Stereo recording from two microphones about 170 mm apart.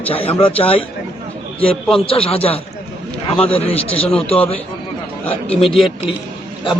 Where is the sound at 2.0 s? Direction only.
35° left (ahead or behind).